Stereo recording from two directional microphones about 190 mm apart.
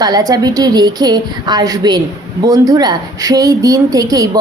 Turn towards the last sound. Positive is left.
turn(degrees=-20)  # may be behind; listen again after turning